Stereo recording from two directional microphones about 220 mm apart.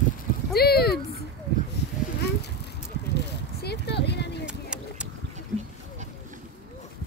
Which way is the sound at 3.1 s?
50° left (ahead or behind).